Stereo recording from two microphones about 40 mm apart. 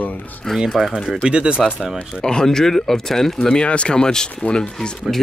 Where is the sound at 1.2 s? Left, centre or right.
Right.